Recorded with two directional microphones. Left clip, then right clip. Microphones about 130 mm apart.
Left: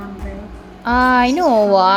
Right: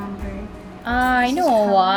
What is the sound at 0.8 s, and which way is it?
Speech, 40° left (ahead or behind).